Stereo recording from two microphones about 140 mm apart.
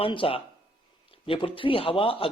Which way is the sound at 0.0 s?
40° left (ahead or behind).